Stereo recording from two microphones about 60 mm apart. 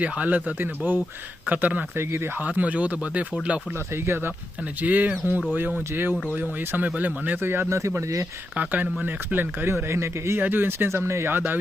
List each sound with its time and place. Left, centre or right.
0.0 s speech: right
2.0 s speech: right
2.4 s speech: right
3.9 s speech: right
4.8 s speech: right
7.4 s speech: right
7.7 s speech: right
8.5 s speech: right
9.6 s speech: right
10.4 s speech: right
11.3 s speech: right